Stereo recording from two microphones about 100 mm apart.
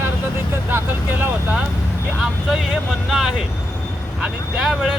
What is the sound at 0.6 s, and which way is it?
Speech, 20° right (ahead or behind).